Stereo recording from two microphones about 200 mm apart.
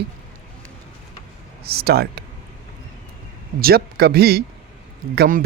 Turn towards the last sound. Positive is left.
turn(degrees=-50)  # may be behind; listen again after turning